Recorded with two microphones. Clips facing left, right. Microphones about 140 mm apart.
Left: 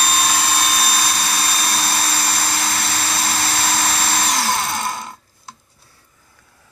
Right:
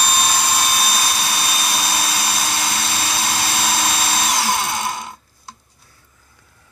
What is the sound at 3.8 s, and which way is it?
Drill, 10° right (ahead or behind).